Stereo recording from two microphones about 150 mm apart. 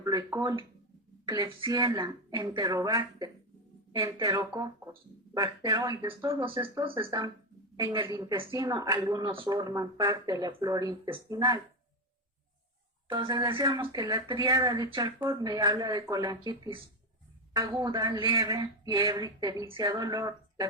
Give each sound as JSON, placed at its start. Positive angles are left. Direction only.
{"t": 0.0, "sound": "speech", "side_deg": -25}
{"t": 6.4, "sound": "speech", "side_deg": -35}
{"t": 13.1, "sound": "speech", "side_deg": -25}